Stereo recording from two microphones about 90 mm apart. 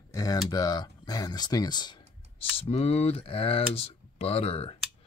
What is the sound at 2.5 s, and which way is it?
Speech, 90° left.